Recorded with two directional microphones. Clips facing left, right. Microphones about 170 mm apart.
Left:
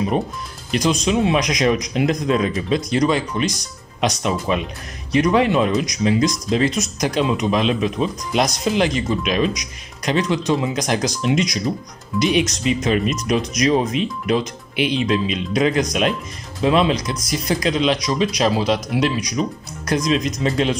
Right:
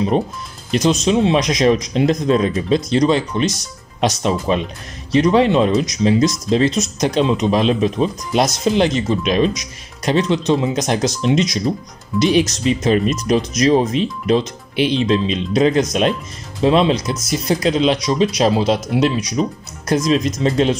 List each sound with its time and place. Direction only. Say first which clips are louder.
1.0 s speech: right 3 dB; 25° right (ahead or behind)
16.9 s speech: right 3 dB; 5° right (ahead or behind)
17.5 s speech: right 3 dB; 30° right (ahead or behind)